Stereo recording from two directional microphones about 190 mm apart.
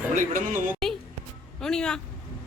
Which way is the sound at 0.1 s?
45° right (ahead or behind).